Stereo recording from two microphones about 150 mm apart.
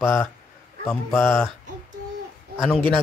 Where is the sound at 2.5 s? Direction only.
Centre (ahead or behind).